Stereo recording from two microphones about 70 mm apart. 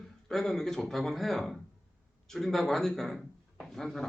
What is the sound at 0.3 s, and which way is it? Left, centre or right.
Speech, centre.